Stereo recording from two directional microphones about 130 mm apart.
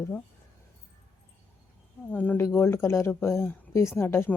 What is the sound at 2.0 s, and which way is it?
Speech, 15° left (ahead or behind).